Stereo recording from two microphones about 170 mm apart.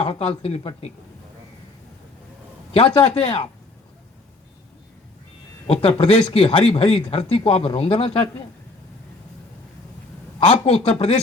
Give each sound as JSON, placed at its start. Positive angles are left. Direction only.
{"t": 0.0, "sound": "speech", "side_deg": 35}
{"t": 2.7, "sound": "speech", "side_deg": 35}
{"t": 5.6, "sound": "speech", "side_deg": 35}
{"t": 10.4, "sound": "speech", "side_deg": 40}